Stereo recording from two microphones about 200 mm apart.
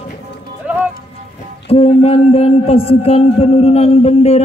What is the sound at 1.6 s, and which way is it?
A man's voice, 30° left (ahead or behind).